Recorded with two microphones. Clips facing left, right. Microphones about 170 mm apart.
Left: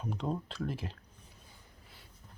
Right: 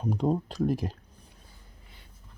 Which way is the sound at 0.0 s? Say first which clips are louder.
Right 9 dB; 40° right (ahead or behind).